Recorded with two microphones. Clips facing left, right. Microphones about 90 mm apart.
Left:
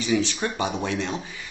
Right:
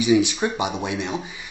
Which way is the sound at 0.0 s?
15° right (ahead or behind).